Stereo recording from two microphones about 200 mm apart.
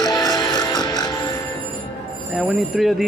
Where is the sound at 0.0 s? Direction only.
20° left (ahead or behind).